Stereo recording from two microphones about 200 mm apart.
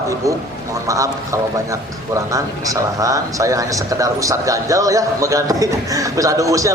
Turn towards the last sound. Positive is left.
turn(degrees=-15)  # may be behind; listen again after turning